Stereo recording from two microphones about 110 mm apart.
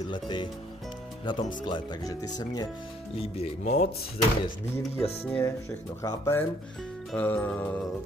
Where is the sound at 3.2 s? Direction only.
80° left.